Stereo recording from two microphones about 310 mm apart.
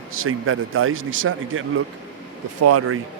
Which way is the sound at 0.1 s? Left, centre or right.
Right.